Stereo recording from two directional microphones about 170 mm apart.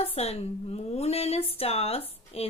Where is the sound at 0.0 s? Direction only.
35° left (ahead or behind).